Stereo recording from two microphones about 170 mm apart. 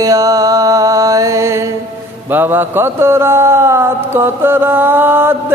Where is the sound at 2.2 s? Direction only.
10° right (ahead or behind).